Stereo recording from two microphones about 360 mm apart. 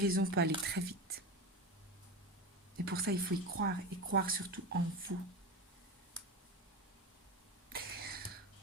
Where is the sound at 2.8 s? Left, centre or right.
Right.